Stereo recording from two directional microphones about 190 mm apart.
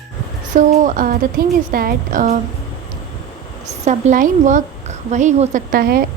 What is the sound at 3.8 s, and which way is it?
A woman's voice, 40° right (ahead or behind).